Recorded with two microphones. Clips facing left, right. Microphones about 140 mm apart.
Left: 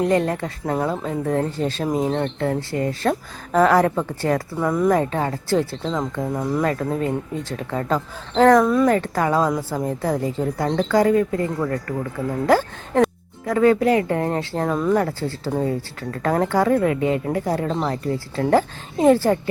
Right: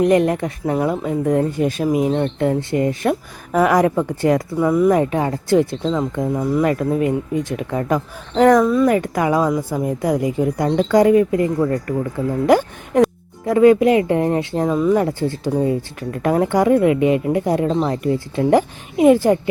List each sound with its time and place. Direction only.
0.0 s speech: 20° right (ahead or behind)
4.6 s speech: 5° right (ahead or behind)
4.9 s speech: 15° right (ahead or behind)
5.9 s speech: 10° right (ahead or behind)
8.6 s speech: centre (ahead or behind)
8.9 s speech: 15° right (ahead or behind)